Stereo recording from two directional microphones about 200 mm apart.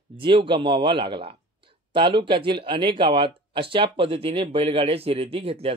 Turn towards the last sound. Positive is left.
turn(degrees=-30)  # may be behind; listen again after turning